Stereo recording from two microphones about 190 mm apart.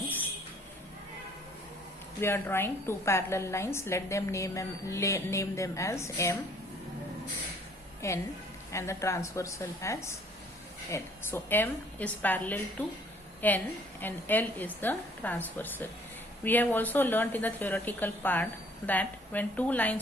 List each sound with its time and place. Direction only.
2.2 s a woman's voice: 10° left (ahead or behind)
8.0 s a woman's voice: 15° left (ahead or behind)